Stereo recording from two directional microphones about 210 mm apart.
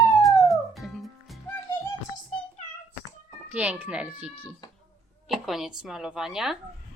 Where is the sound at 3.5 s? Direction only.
10° right (ahead or behind).